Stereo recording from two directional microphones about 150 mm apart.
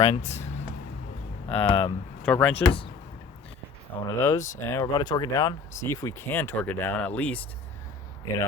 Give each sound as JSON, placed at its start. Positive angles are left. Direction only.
{"t": 0.0, "sound": "speech", "side_deg": 50}
{"t": 1.5, "sound": "speech", "side_deg": 40}
{"t": 2.2, "sound": "speech", "side_deg": 10}
{"t": 2.6, "sound": "speech", "side_deg": 35}
{"t": 4.0, "sound": "speech", "side_deg": 20}